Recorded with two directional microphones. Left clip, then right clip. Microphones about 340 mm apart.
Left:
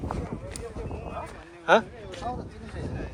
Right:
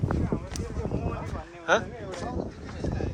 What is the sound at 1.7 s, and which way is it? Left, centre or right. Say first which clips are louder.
Speech: left 4 dB; centre.